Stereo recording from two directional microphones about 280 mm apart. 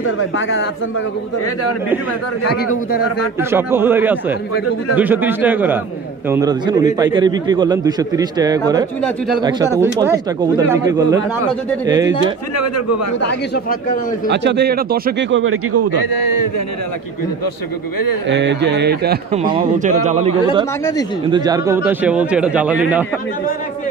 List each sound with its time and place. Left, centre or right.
0.0 s a man's voice: left
3.3 s a man's voice: centre
12.5 s speech: left
14.3 s speech: right
18.3 s speech: right
19.3 s a man's voice: centre
21.3 s speech: centre